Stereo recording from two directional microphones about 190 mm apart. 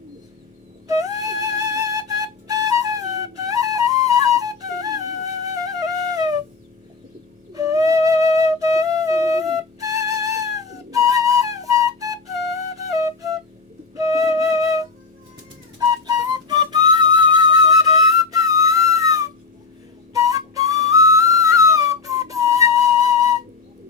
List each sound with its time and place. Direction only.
0.9 s flute: 20° right (ahead or behind)
7.5 s flute: 15° right (ahead or behind)
15.8 s music: 20° right (ahead or behind)